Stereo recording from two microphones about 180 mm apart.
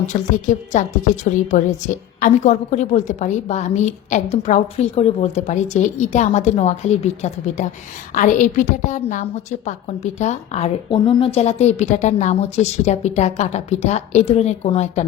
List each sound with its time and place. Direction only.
0.1 s a woman's voice: 45° left (ahead or behind)